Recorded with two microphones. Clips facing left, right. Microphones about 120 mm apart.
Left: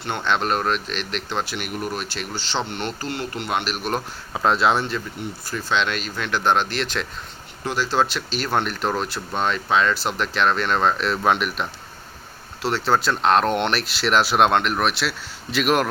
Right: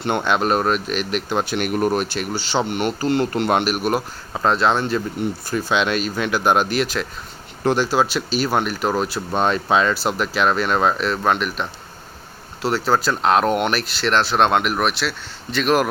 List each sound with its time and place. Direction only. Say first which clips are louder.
0.2 s speech: right 1 dB; 10° right (ahead or behind)
1.5 s speech: right 8 dB; 50° right (ahead or behind)
2.3 s speech: right 5 dB; 10° right (ahead or behind)
3.2 s speech: right 6 dB; 45° right (ahead or behind)
3.7 s speech: right 5 dB; 5° right (ahead or behind)
5.6 s speech: right 3 dB; 10° right (ahead or behind)
7.6 s speech: right 7 dB; 50° right (ahead or behind)
7.9 s speech: right 3 dB; 5° right (ahead or behind)
9.3 s speech: right 4 dB; 40° right (ahead or behind)
9.7 s speech: even; 5° right (ahead or behind)